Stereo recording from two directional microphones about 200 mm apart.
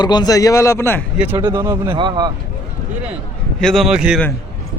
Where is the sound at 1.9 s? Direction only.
25° right (ahead or behind).